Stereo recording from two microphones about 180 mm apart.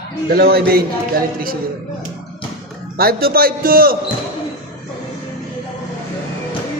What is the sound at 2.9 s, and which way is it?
A man's voice, 55° right (ahead or behind).